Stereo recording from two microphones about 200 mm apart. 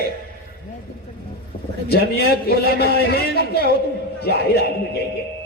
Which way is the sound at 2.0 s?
50° left (ahead or behind).